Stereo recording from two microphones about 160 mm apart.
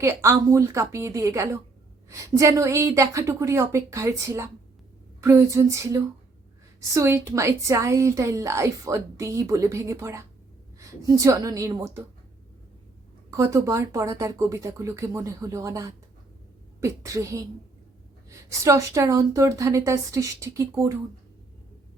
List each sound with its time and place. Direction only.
0.0 s a woman's voice: 20° right (ahead or behind)
13.3 s a woman's voice: 20° right (ahead or behind)